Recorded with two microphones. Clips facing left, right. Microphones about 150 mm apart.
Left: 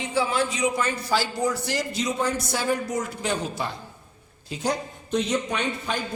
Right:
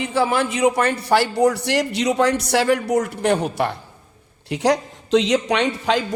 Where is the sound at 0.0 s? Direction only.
60° right (ahead or behind).